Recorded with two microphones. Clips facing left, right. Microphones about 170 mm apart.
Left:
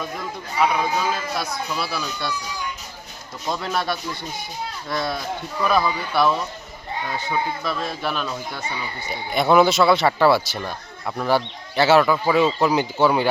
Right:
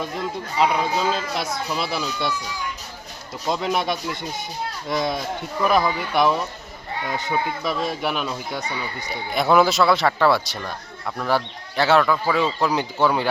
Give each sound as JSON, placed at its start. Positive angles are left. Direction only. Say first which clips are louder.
{"t": 0.6, "sound": "speech", "louder": "even", "side_deg": -25}
{"t": 3.4, "sound": "speech", "louder": "right 2 dB", "side_deg": -15}
{"t": 9.0, "sound": "speech", "louder": "left 1 dB", "side_deg": 0}